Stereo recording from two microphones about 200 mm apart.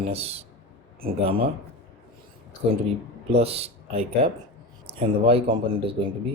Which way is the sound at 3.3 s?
30° right (ahead or behind).